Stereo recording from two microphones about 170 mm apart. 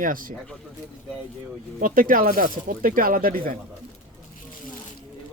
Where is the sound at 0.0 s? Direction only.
55° right (ahead or behind).